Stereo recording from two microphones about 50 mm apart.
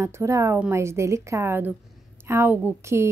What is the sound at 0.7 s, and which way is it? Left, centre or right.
Speech, right.